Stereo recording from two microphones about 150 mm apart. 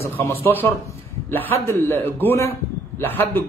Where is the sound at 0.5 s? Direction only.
15° left (ahead or behind).